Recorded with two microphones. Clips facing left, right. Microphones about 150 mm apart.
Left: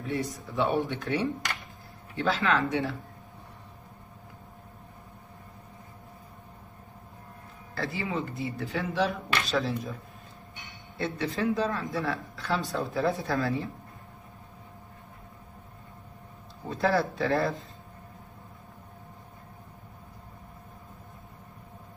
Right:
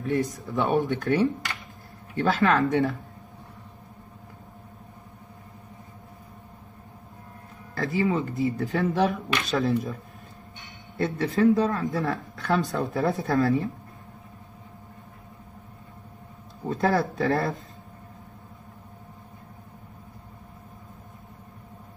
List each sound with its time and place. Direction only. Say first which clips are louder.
0.0 s speech: right 6 dB; 45° right (ahead or behind)
7.7 s speech: right 7 dB; 45° right (ahead or behind)
11.0 s speech: right 7 dB; 45° right (ahead or behind)
16.6 s speech: right 2 dB; 45° right (ahead or behind)